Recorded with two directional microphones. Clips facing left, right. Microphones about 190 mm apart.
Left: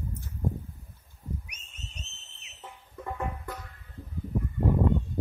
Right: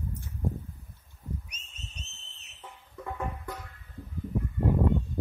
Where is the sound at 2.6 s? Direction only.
Centre (ahead or behind).